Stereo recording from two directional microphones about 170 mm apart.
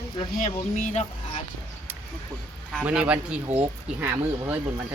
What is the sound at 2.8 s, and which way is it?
Speech, 5° right (ahead or behind).